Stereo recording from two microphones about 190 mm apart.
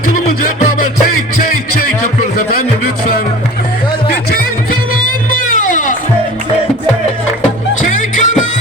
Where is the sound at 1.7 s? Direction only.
50° left (ahead or behind).